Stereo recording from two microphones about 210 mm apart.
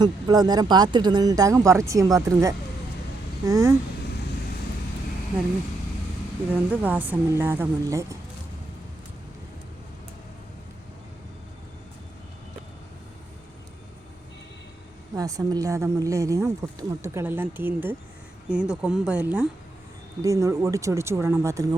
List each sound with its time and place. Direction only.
0.0 s speech: 20° right (ahead or behind)
6.7 s speech: 10° right (ahead or behind)
15.1 s speech: 15° right (ahead or behind)